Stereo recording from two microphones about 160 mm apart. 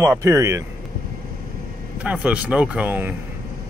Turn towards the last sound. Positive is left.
turn(degrees=-10)  # may be behind; listen again after turning